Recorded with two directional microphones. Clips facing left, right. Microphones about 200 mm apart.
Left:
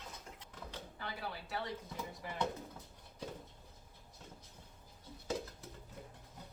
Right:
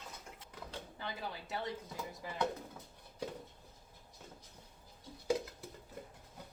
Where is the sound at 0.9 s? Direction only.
20° right (ahead or behind).